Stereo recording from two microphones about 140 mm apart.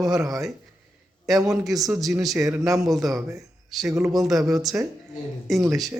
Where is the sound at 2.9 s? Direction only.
Centre (ahead or behind).